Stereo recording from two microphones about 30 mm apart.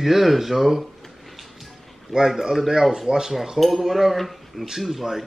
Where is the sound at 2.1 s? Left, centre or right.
Centre.